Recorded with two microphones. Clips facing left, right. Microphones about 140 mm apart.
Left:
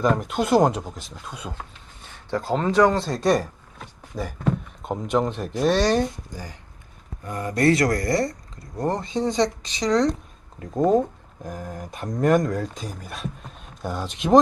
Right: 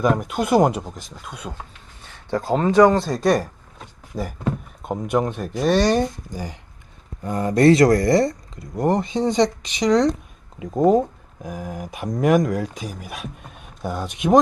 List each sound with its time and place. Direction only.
0.0 s speech: 10° right (ahead or behind)
4.8 s a sound: 5° right (ahead or behind)
5.1 s speech: 5° right (ahead or behind)
6.3 s speech: 20° right (ahead or behind)